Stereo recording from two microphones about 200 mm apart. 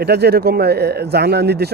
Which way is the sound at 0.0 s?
55° right (ahead or behind).